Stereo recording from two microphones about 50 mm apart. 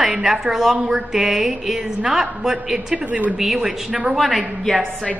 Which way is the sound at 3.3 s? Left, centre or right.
Centre.